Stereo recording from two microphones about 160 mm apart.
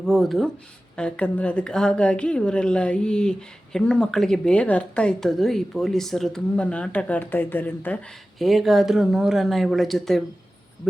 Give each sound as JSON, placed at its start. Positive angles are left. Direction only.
{"t": 0.0, "sound": "a woman's voice", "side_deg": 0}
{"t": 8.4, "sound": "speech", "side_deg": 0}